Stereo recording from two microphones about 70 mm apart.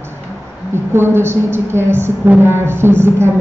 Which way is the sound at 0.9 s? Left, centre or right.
Right.